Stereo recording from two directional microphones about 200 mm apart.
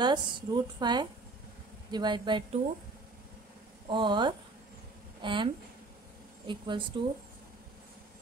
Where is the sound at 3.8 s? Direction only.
25° right (ahead or behind).